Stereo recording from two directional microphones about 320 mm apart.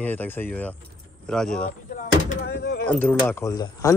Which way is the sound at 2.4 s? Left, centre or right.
Left.